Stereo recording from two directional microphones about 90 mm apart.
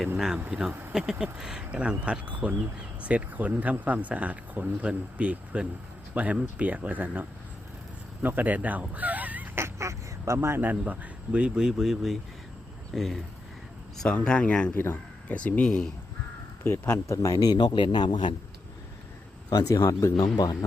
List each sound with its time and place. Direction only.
0.7 s speech: 25° right (ahead or behind)
1.2 s speech: 5° right (ahead or behind)
9.6 s speech: 35° right (ahead or behind); by 15.8 s 15° left (ahead or behind)
16.6 s a man's voice: 25° left (ahead or behind)
17.2 s a man's voice: 45° left (ahead or behind); by 18.3 s 60° left (ahead or behind)
19.5 s speech: 45° left (ahead or behind)
20.2 s speech: 50° left (ahead or behind)